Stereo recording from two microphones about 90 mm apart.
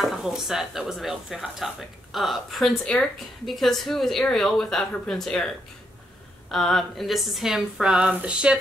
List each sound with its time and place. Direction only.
0.0 s speech: centre (ahead or behind)
6.5 s speech: 5° left (ahead or behind)